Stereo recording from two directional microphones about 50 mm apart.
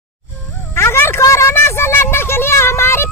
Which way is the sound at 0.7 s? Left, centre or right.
Left.